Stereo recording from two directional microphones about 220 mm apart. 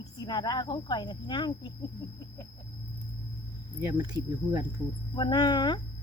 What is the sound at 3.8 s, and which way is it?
Speech, 20° right (ahead or behind).